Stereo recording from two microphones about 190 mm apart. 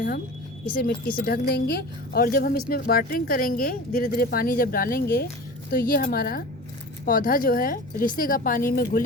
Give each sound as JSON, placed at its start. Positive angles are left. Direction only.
{"t": 0.7, "sound": "a woman's voice", "side_deg": 60}